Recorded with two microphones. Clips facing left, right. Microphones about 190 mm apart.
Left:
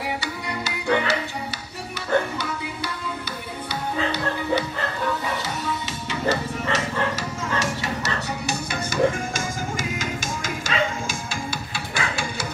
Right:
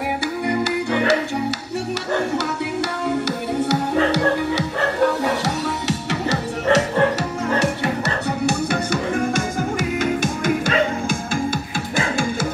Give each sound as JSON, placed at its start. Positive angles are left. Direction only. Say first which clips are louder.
{"t": 2.3, "sound": "music", "louder": "right 8 dB", "side_deg": -75}